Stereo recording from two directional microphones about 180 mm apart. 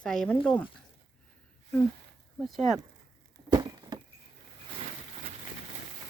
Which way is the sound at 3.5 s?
25° right (ahead or behind).